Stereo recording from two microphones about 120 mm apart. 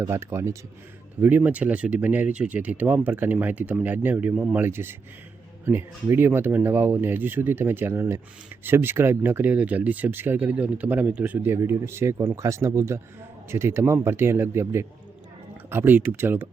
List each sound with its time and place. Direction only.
0.1 s speech: 20° right (ahead or behind)